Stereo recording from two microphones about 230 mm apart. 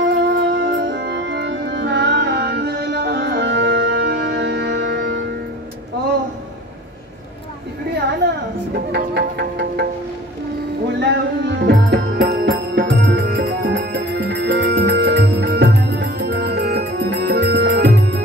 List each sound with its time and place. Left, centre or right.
0.0 s music: right
8.2 s a sound: right
8.9 s music: right
10.9 s music: right